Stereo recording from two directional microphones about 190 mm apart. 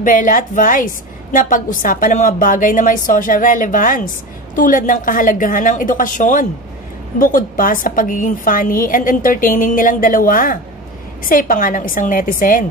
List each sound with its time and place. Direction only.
0.0 s a woman's voice: 45° left (ahead or behind)